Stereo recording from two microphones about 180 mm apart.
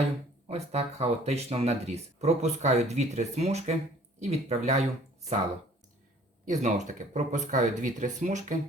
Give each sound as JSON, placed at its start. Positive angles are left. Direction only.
{"t": 0.4, "sound": "speech", "side_deg": -35}
{"t": 6.5, "sound": "speech", "side_deg": -40}